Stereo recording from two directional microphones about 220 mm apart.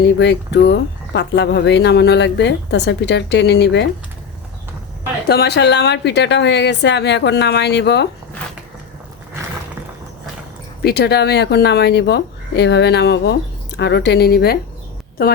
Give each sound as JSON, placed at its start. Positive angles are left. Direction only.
{"t": 0.2, "sound": "speech", "side_deg": 50}
{"t": 5.3, "sound": "speech", "side_deg": 50}
{"t": 10.8, "sound": "speech", "side_deg": 45}